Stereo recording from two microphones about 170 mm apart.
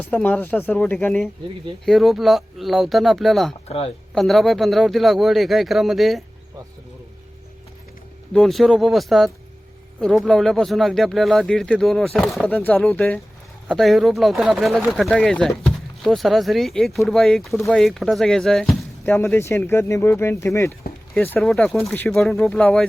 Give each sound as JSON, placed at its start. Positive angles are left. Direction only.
{"t": 0.0, "sound": "speech", "side_deg": 10}
{"t": 3.7, "sound": "speech", "side_deg": 35}
{"t": 4.1, "sound": "speech", "side_deg": 0}
{"t": 8.3, "sound": "speech", "side_deg": 0}
{"t": 21.2, "sound": "speech", "side_deg": 0}